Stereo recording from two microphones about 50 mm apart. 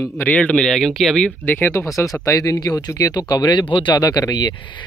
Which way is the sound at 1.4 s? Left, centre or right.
Left.